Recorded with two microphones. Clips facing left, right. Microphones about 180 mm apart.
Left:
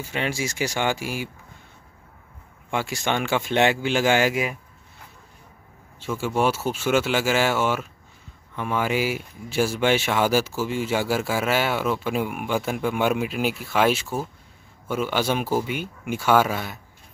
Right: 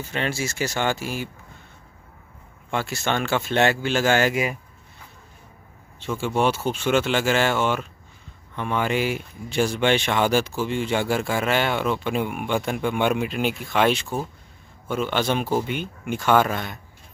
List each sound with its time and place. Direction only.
0.0 s speech: 10° left (ahead or behind)
2.7 s speech: 15° left (ahead or behind)
5.9 s speech: 5° left (ahead or behind)